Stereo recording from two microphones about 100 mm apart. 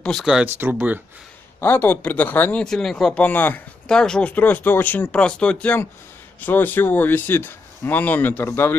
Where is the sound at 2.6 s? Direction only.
5° left (ahead or behind).